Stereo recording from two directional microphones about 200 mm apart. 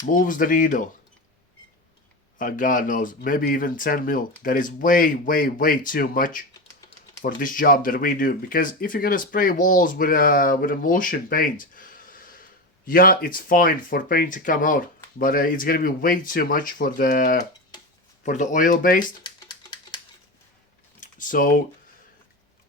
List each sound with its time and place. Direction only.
0.1 s speech: 40° left (ahead or behind)
2.4 s speech: 40° left (ahead or behind)
19.2 s typewriter: 20° left (ahead or behind)
21.0 s typing: 40° left (ahead or behind)